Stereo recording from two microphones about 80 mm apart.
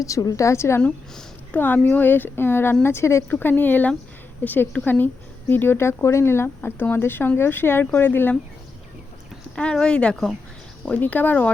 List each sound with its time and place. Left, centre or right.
0.0 s a woman's voice: left
1.5 s speech: left
3.2 s speech: left
9.6 s speech: centre